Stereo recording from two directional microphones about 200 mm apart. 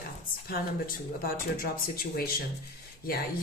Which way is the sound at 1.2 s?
50° left (ahead or behind).